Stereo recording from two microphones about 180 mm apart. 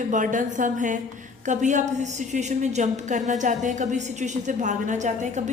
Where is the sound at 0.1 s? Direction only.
45° right (ahead or behind).